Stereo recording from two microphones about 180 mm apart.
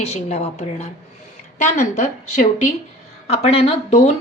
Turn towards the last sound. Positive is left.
turn(degrees=35)  # may be behind; listen again after turning